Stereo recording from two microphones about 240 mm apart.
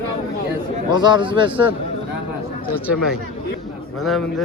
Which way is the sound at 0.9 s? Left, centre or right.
Centre.